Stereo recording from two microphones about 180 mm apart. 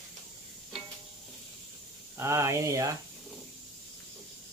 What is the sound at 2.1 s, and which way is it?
Speech, 15° right (ahead or behind).